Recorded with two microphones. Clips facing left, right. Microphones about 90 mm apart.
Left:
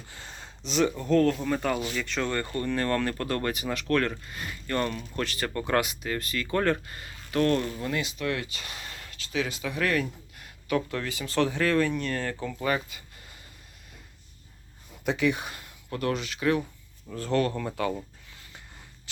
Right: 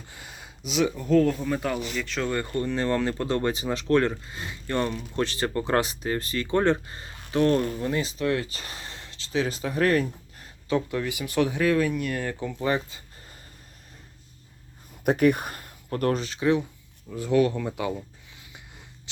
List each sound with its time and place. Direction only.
0.1 s speech: 10° right (ahead or behind)
2.6 s speech: 15° right (ahead or behind); by 10.8 s 35° right (ahead or behind)
10.8 s speech: 15° right (ahead or behind)
15.0 s speech: 50° right (ahead or behind); by 17.9 s 15° right (ahead or behind)